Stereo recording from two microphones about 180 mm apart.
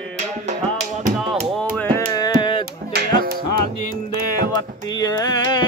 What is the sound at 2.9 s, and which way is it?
Music, 55° right (ahead or behind).